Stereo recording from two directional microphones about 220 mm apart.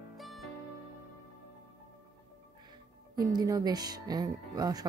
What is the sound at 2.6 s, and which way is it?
Speech, 20° right (ahead or behind).